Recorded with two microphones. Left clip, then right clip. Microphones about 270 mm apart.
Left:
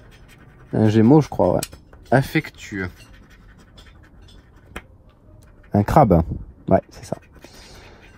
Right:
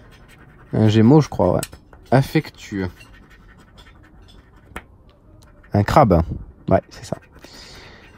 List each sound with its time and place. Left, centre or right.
0.7 s speech: left
2.4 s speech: centre
5.7 s speech: left
6.9 s a sound: left